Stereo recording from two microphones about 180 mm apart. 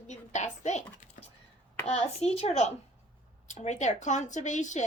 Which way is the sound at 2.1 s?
35° left (ahead or behind).